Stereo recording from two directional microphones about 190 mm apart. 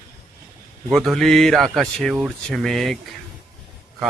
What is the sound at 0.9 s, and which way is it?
Speech, centre (ahead or behind).